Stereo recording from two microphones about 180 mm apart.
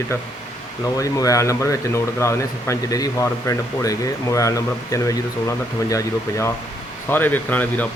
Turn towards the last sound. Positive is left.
turn(degrees=10)  # may be behind; listen again after turning